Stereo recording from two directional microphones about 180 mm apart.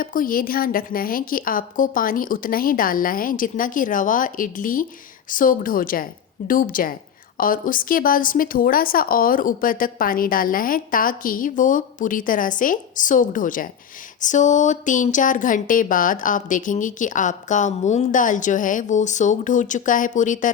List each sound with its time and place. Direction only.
0.0 s speech: 50° left (ahead or behind)